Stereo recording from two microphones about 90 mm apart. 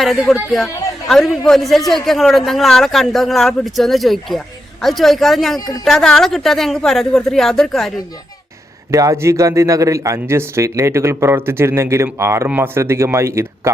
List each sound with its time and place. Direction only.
0.0 s a man's voice: centre (ahead or behind)
5.5 s speech: 40° left (ahead or behind)
5.8 s a man's voice: 5° left (ahead or behind)
8.9 s a man's voice: 35° right (ahead or behind)